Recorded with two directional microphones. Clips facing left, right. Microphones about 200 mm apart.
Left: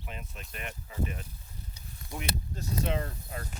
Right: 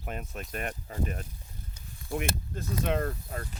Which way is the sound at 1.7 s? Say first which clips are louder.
Right 8 dB; 50° right (ahead or behind).